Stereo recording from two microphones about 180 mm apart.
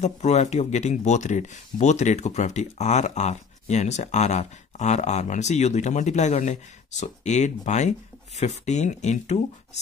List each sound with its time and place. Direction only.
0.0 s speech: 40° left (ahead or behind)